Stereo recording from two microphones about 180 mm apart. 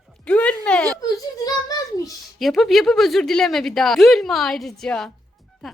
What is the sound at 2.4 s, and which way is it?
Speech, centre (ahead or behind).